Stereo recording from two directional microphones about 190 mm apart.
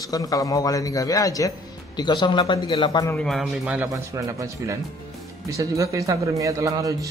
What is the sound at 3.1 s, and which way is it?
Speech, centre (ahead or behind).